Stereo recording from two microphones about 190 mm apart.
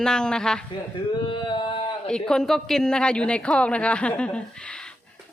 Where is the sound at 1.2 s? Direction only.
25° left (ahead or behind).